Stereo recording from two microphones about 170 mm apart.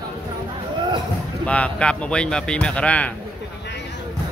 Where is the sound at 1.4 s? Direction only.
5° left (ahead or behind).